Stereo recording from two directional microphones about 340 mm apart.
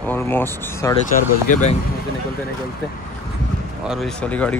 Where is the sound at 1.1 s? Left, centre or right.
Left.